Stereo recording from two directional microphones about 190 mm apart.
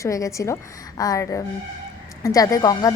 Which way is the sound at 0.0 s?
15° left (ahead or behind).